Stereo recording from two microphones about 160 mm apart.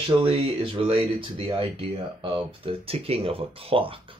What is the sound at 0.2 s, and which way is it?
Speech, 35° right (ahead or behind).